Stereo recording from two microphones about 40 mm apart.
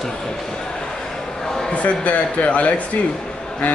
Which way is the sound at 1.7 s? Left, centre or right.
Left.